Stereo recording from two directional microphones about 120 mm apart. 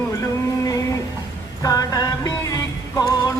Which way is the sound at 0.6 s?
30° left (ahead or behind).